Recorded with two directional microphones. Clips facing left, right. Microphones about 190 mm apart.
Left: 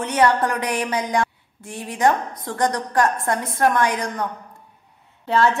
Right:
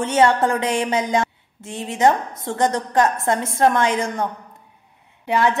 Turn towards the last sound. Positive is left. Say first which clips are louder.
# even
turn(degrees=-15)  # may be behind; listen again after turning